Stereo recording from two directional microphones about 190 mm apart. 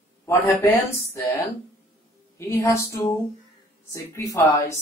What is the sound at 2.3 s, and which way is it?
Speech, 15° left (ahead or behind).